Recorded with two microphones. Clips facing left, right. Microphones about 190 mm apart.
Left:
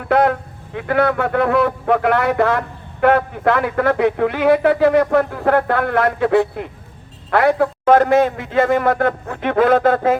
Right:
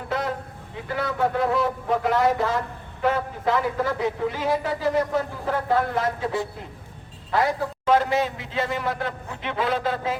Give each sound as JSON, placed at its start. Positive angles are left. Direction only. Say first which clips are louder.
{"t": 0.0, "sound": "a man's voice", "louder": "left 11 dB", "side_deg": 65}